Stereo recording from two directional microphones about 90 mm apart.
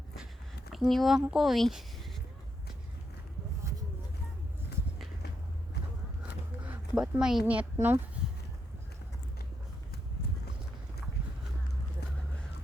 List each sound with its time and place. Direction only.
0.7 s speech: centre (ahead or behind)
6.9 s speech: 5° right (ahead or behind)
7.4 s a child's voice: 15° right (ahead or behind)